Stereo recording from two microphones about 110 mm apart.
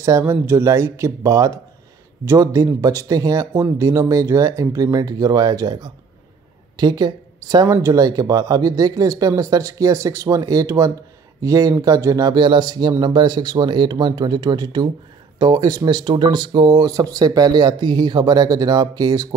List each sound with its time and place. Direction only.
0.2 s speech: 20° right (ahead or behind)